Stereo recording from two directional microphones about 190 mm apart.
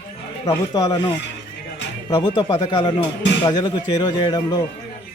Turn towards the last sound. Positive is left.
turn(degrees=20)  # may be behind; listen again after turning